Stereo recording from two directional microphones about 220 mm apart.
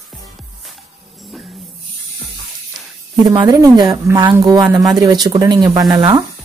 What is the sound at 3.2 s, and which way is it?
Speech, 15° right (ahead or behind).